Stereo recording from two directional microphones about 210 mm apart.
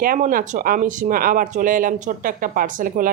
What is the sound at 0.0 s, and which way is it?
Speech, 40° right (ahead or behind).